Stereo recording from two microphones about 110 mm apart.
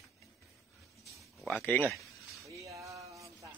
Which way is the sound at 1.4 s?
15° left (ahead or behind).